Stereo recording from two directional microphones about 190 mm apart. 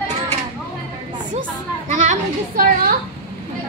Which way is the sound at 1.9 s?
45° right (ahead or behind).